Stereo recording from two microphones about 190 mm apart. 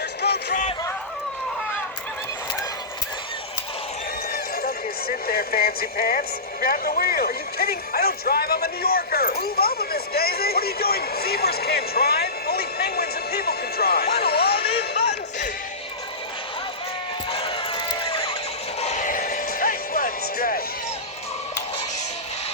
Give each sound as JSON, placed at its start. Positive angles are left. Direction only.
{"t": 0.2, "sound": "music", "side_deg": 60}
{"t": 4.3, "sound": "speech", "side_deg": 50}
{"t": 14.8, "sound": "music", "side_deg": 60}
{"t": 17.3, "sound": "a sound", "side_deg": 25}
{"t": 18.8, "sound": "music", "side_deg": 35}